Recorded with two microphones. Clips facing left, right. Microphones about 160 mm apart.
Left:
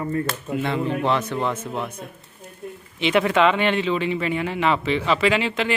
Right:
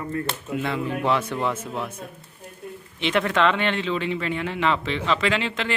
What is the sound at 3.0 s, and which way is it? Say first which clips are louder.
A man's voice: left 3 dB; 5° left (ahead or behind).